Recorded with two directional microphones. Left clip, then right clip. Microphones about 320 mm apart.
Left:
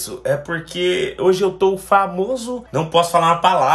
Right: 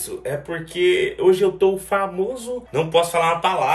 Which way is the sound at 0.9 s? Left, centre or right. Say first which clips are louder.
Left 2 dB; centre.